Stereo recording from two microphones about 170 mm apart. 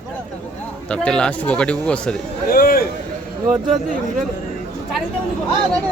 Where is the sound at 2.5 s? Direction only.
60° left (ahead or behind).